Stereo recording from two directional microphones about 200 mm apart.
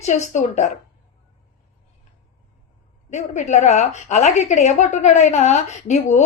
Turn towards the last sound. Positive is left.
turn(degrees=35)  # may be behind; listen again after turning